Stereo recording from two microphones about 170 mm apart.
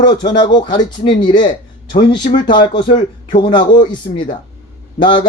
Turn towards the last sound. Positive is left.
turn(degrees=30)  # may be behind; listen again after turning